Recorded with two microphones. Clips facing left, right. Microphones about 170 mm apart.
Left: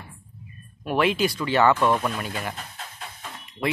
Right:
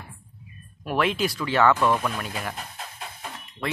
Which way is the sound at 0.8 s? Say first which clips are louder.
Left 2 dB; centre (ahead or behind).